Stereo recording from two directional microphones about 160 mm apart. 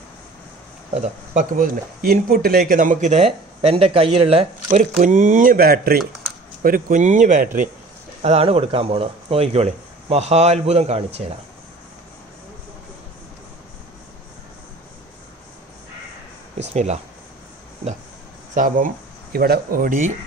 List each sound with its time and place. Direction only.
1.0 s speech: 55° right (ahead or behind); by 4.5 s 35° right (ahead or behind)
4.6 s speech: 50° right (ahead or behind); by 6.0 s 65° right (ahead or behind)
6.6 s speech: 55° right (ahead or behind)
8.2 s speech: 40° right (ahead or behind)
16.6 s speech: 45° right (ahead or behind)
18.5 s speech: 55° right (ahead or behind)
19.3 s speech: 75° right (ahead or behind)